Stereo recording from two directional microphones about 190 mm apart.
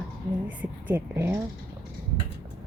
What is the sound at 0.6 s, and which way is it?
Speech, 10° right (ahead or behind).